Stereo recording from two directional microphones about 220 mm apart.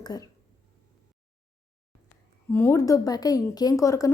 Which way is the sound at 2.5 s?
10° left (ahead or behind).